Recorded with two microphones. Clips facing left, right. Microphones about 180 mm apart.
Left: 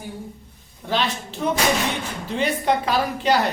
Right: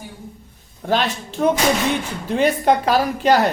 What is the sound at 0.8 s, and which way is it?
A woman's voice, 50° right (ahead or behind).